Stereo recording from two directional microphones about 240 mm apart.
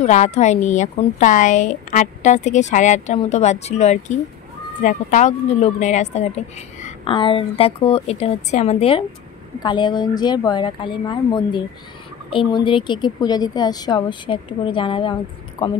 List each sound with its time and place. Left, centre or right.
0.0 s a woman's voice: left